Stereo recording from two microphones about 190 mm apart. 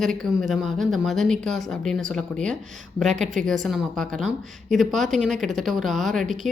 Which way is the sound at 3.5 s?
Centre (ahead or behind).